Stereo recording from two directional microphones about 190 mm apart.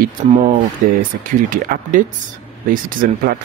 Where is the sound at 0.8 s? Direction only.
45° right (ahead or behind).